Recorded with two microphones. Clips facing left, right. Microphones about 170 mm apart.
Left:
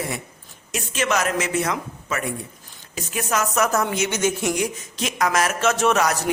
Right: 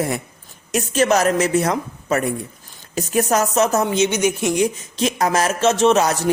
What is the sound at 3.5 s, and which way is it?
A woman's voice, 25° right (ahead or behind).